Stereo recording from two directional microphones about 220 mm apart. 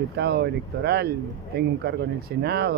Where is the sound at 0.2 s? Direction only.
45° right (ahead or behind).